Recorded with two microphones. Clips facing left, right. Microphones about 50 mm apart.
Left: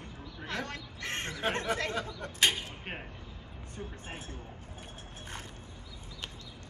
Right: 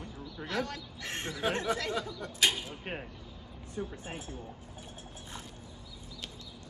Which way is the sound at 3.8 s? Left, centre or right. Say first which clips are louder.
Right 4 dB; left.